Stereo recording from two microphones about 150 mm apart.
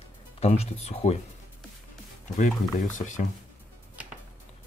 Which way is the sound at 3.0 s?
55° left (ahead or behind).